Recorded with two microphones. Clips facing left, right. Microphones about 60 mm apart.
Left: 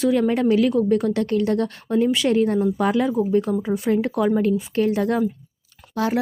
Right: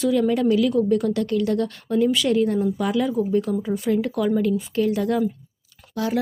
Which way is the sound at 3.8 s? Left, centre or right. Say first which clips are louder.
Left 2 dB; left.